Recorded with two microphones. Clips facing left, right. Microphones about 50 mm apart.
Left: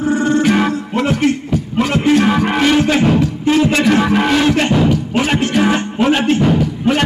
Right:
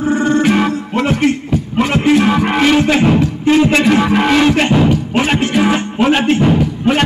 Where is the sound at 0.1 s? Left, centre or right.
Right.